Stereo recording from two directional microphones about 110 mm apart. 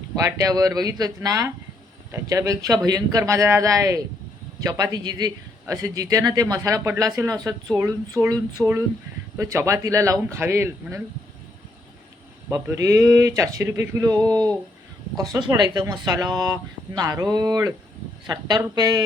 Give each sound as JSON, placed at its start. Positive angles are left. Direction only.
{"t": 0.2, "sound": "a man's voice", "side_deg": -30}
{"t": 12.5, "sound": "a man's voice", "side_deg": -25}
{"t": 15.6, "sound": "a man's voice", "side_deg": -40}